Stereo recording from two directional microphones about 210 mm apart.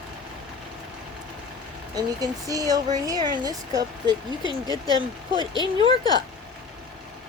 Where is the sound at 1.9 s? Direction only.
15° right (ahead or behind).